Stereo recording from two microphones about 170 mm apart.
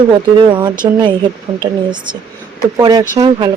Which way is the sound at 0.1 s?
25° right (ahead or behind).